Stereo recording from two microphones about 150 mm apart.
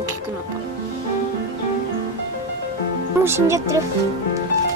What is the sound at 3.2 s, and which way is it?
Speech, 15° right (ahead or behind).